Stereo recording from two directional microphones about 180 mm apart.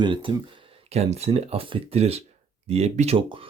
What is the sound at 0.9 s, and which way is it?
Speech, 35° right (ahead or behind).